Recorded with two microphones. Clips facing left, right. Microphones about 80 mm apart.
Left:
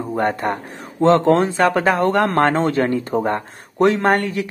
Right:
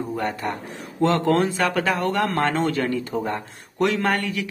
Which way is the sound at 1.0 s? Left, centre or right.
Left.